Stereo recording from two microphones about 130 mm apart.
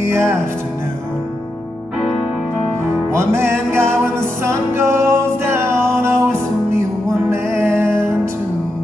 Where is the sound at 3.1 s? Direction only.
20° right (ahead or behind).